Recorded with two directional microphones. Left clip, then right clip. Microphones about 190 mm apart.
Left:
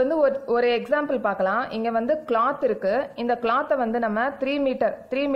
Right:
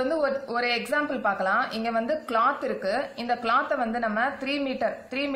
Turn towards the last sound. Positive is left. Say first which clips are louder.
# left 4 dB
turn(degrees=45)  # may be behind; listen again after turning